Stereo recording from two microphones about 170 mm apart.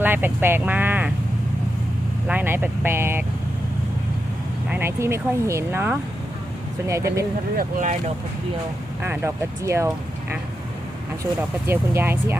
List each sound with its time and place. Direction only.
0.0 s speech: 10° right (ahead or behind)
2.2 s speech: 10° right (ahead or behind)
4.7 s speech: 15° right (ahead or behind)
7.5 s speech: 50° right (ahead or behind)
9.0 s speech: 15° right (ahead or behind)